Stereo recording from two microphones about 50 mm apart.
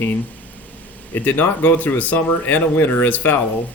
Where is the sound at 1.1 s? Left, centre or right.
Left.